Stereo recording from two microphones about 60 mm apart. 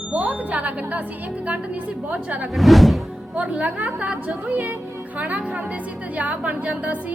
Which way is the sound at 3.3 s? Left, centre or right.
Right.